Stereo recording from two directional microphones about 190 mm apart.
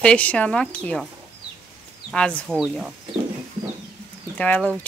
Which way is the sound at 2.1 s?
5° left (ahead or behind).